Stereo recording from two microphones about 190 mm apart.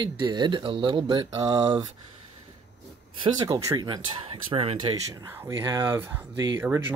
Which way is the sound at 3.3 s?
20° right (ahead or behind).